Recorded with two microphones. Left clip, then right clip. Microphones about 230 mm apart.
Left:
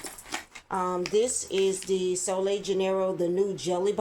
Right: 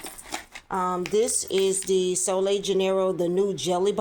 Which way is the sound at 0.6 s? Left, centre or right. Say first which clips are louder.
Right 2 dB; right.